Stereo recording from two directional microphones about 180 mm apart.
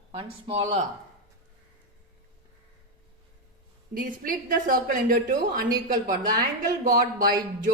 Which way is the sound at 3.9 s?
50° right (ahead or behind).